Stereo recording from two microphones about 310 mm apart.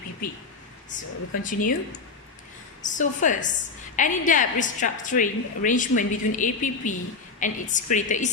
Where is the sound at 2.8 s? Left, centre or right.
Left.